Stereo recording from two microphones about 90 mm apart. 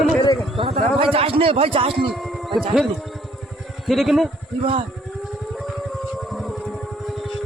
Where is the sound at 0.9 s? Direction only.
80° right.